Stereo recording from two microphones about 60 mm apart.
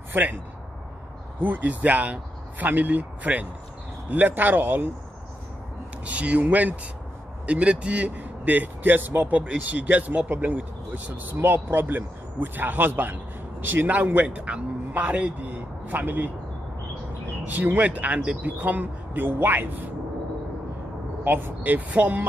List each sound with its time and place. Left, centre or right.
0.1 s a man's voice: right
1.4 s speech: right
6.0 s speech: right
17.5 s speech: right
21.2 s speech: right